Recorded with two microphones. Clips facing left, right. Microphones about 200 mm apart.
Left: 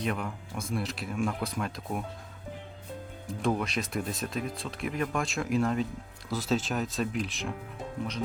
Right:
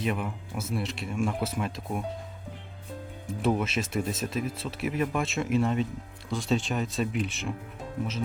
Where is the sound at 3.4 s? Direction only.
5° right (ahead or behind).